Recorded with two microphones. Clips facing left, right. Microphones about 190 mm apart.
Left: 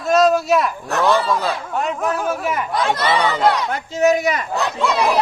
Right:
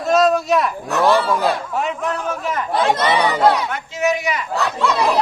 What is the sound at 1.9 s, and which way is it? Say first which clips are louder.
Speech: left 2 dB; 45° left (ahead or behind).